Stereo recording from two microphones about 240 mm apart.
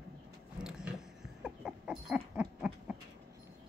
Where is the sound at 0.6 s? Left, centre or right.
Centre.